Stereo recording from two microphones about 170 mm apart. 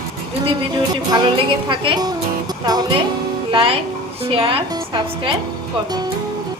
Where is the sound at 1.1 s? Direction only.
30° right (ahead or behind).